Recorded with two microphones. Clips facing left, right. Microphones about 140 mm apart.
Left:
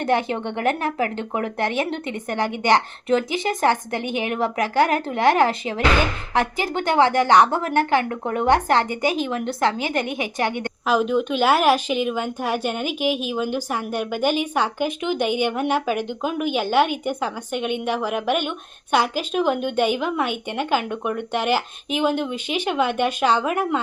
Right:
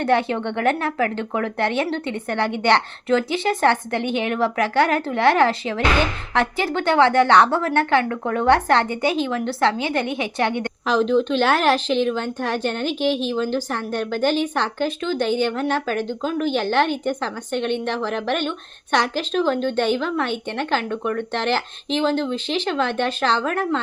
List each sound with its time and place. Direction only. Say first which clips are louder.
0.0 s a woman's voice: right 2 dB; 15° left (ahead or behind)